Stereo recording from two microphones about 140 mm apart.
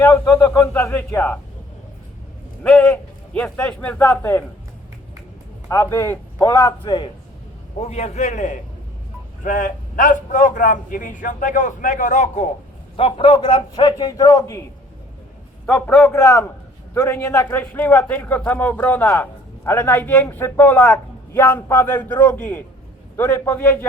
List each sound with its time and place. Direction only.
0.0 s a man's voice: 15° left (ahead or behind)
2.6 s a man's voice: 10° left (ahead or behind)
5.6 s a man's voice: 20° left (ahead or behind)
6.8 s a man's voice: 35° left (ahead or behind)
7.8 s a man's voice: 50° left (ahead or behind)
13.0 s a man's voice: 45° left (ahead or behind); by 14.6 s 25° left (ahead or behind)
15.6 s a man's voice: 15° left (ahead or behind)
16.2 s a man's voice: 20° left (ahead or behind)